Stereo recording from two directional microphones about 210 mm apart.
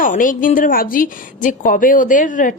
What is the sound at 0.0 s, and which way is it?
Speech, 40° left (ahead or behind).